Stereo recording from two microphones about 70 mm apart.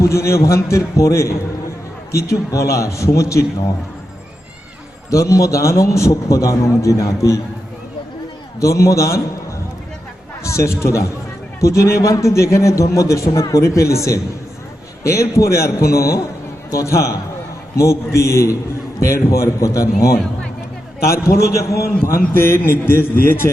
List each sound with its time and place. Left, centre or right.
0.0 s a man's voice: left
5.1 s a man's voice: left
8.6 s a man's voice: left
10.4 s a man's voice: left